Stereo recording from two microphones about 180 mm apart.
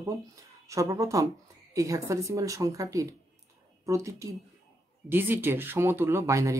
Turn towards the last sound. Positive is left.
turn(degrees=-15)  # may be behind; listen again after turning